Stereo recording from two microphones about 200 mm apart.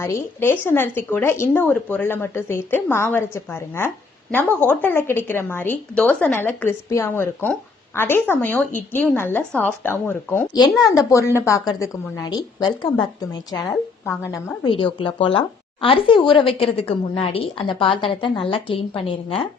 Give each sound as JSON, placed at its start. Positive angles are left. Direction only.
{"t": 0.0, "sound": "speech", "side_deg": 10}
{"t": 14.6, "sound": "a woman's voice", "side_deg": 25}